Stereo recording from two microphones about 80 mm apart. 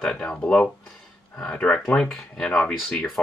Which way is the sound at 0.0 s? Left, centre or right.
Centre.